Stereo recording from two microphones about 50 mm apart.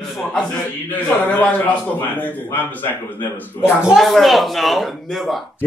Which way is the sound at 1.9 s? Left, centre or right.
Left.